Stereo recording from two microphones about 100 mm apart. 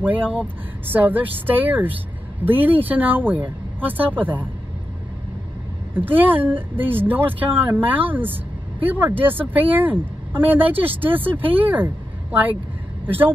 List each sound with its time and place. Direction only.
0.0 s speech: 15° right (ahead or behind)
5.9 s speech: 20° right (ahead or behind)